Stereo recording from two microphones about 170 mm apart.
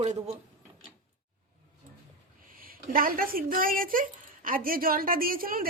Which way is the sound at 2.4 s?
55° right (ahead or behind).